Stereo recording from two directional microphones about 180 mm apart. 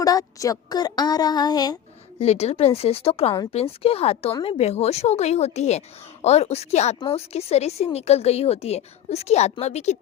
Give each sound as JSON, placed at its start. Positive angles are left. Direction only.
{"t": 0.0, "sound": "speech", "side_deg": 20}
{"t": 2.1, "sound": "speech", "side_deg": 35}